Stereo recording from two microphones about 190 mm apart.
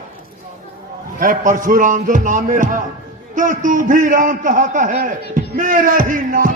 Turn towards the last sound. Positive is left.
turn(degrees=-45)  # may be behind; listen again after turning